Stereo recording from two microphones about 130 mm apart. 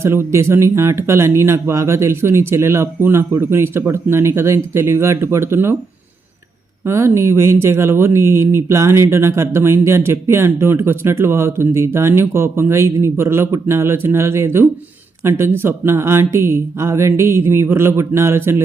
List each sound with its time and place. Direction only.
0.0 s speech: 20° right (ahead or behind)
6.8 s speech: 20° right (ahead or behind)